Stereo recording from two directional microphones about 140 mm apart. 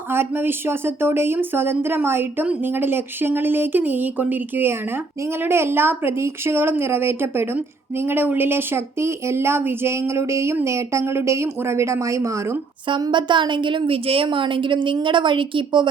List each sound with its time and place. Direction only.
0.1 s a woman's voice: 15° right (ahead or behind)
12.9 s a woman's voice: 35° right (ahead or behind)